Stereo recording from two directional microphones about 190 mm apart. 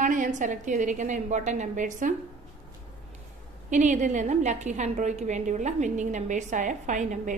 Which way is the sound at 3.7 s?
40° right (ahead or behind).